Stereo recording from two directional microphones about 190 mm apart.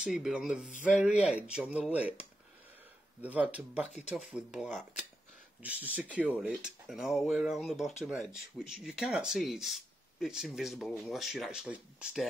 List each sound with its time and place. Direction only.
0.0 s speech: 5° right (ahead or behind)
0.7 s speech: 45° left (ahead or behind)
1.2 s speech: 5° right (ahead or behind)